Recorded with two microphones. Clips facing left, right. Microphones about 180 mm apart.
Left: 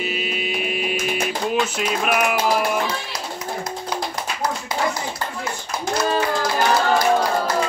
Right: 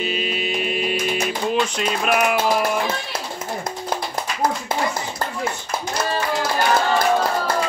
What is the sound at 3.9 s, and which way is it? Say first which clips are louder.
Clapping: right 2 dB; 50° right (ahead or behind).